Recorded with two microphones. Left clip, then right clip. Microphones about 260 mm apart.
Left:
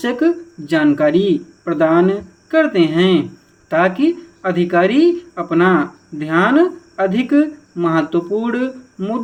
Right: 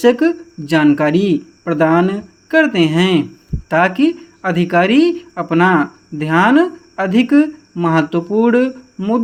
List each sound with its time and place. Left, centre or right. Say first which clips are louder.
0.0 s speech: right 4 dB; right